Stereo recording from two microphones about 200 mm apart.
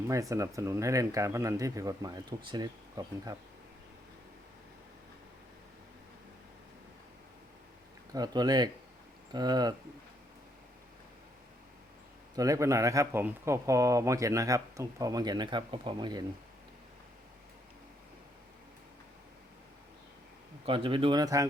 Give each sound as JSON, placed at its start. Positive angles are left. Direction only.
{"t": 0.1, "sound": "speech", "side_deg": -15}
{"t": 8.1, "sound": "speech", "side_deg": -20}
{"t": 12.4, "sound": "speech", "side_deg": -15}
{"t": 20.7, "sound": "speech", "side_deg": -25}